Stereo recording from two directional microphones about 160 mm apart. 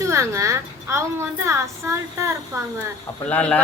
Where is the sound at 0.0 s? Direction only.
20° right (ahead or behind).